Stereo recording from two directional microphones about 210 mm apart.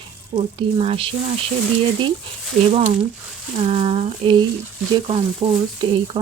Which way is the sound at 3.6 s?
25° right (ahead or behind).